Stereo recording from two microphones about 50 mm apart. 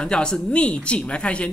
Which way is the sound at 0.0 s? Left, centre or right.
Centre.